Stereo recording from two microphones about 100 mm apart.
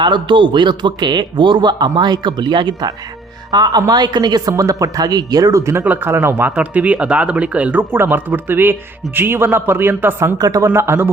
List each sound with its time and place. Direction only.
0.0 s a man's voice: 50° right (ahead or behind); by 5.8 s 30° right (ahead or behind)
5.8 s a man's voice: 15° right (ahead or behind)
10.3 s speech: 40° right (ahead or behind)
10.7 s a man's voice: 25° right (ahead or behind)